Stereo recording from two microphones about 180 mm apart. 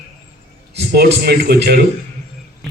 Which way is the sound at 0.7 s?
65° right (ahead or behind).